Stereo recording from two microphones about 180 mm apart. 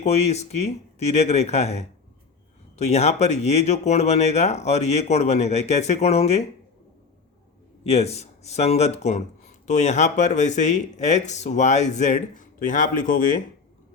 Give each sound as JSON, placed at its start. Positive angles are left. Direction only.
{"t": 0.0, "sound": "speech", "side_deg": 35}
{"t": 7.9, "sound": "speech", "side_deg": 35}